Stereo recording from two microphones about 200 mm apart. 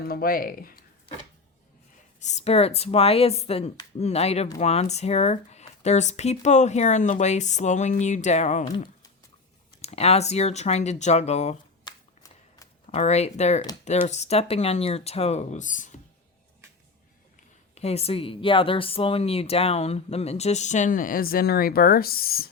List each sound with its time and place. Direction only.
0.1 s speech: 45° left (ahead or behind)
2.2 s speech: 35° left (ahead or behind)
11.9 s shuffling cards: 15° left (ahead or behind)
12.9 s speech: 35° left (ahead or behind)
17.7 s speech: 30° left (ahead or behind); by 22.4 s 50° left (ahead or behind)